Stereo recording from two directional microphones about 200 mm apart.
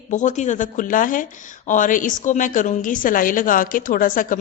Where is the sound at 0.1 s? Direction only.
40° left (ahead or behind).